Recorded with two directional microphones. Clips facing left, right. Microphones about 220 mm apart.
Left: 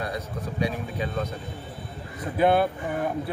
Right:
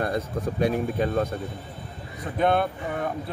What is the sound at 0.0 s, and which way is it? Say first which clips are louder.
Speech: right 5 dB; 50° right (ahead or behind).